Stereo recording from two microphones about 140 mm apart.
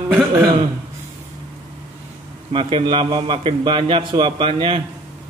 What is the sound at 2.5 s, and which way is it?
A man's voice, 35° right (ahead or behind).